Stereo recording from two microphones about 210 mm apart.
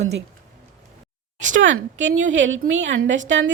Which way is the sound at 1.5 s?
65° right (ahead or behind).